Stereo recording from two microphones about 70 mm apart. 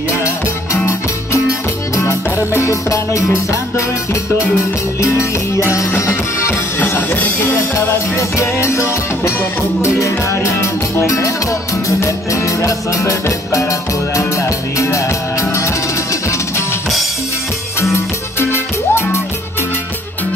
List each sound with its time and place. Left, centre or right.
2.0 s music: left
5.0 s music: left
7.1 s music: left
7.3 s music: left
17.9 s music: left